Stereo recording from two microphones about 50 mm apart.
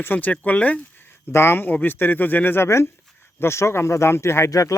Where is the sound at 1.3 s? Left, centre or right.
Left.